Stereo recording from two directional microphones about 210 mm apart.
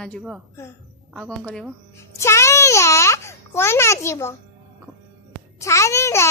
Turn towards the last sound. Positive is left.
turn(degrees=15)  # may be behind; listen again after turning